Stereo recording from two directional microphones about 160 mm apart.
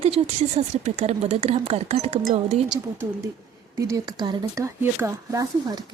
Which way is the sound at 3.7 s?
20° right (ahead or behind).